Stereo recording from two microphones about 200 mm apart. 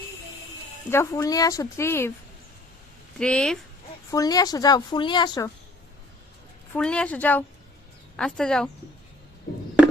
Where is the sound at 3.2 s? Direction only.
5° left (ahead or behind).